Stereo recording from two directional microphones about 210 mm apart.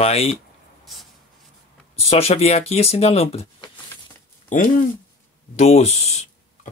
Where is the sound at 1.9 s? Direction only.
30° left (ahead or behind).